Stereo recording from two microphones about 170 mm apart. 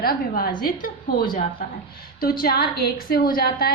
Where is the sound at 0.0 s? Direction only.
60° left (ahead or behind).